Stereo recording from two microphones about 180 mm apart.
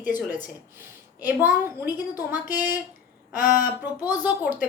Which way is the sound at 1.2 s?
10° right (ahead or behind).